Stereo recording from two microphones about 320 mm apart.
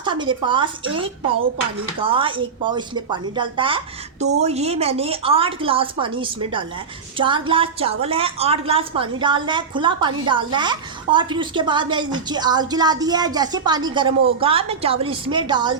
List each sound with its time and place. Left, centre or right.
0.0 s a woman's voice: centre